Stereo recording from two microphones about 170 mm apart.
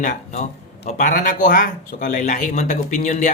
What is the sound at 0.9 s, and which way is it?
Speech, 50° left (ahead or behind).